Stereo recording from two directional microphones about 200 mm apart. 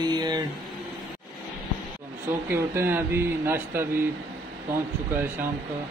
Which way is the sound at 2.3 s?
10° right (ahead or behind).